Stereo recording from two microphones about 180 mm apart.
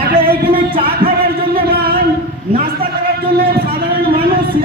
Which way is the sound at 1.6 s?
60° right (ahead or behind).